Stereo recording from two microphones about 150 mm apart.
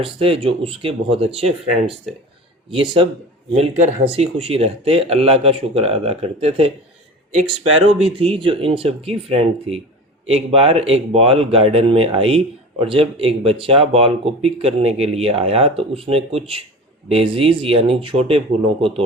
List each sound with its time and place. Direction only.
0.0 s speech: 35° right (ahead or behind)
2.6 s speech: 35° right (ahead or behind)